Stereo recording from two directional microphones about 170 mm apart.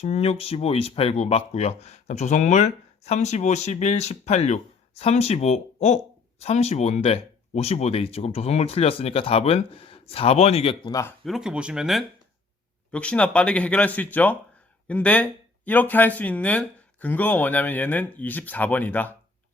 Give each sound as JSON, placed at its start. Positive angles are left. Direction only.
{"t": 0.0, "sound": "speech", "side_deg": 35}
{"t": 11.3, "sound": "speech", "side_deg": -5}